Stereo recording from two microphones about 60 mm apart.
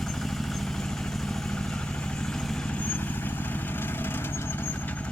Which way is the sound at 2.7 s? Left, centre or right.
Left.